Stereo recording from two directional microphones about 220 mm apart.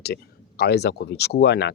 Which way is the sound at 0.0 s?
45° left (ahead or behind).